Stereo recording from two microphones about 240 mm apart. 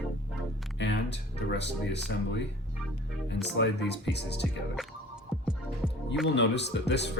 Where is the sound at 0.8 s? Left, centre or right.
Left.